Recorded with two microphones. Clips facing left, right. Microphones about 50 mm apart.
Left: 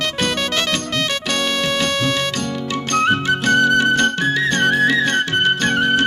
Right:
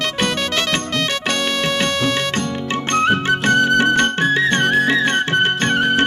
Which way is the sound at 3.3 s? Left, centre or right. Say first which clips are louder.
Even; right.